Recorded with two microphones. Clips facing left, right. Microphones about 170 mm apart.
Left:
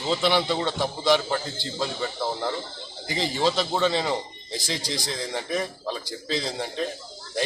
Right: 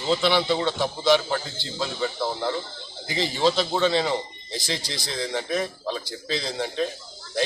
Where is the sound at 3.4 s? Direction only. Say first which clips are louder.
Right 2 dB; 5° left (ahead or behind).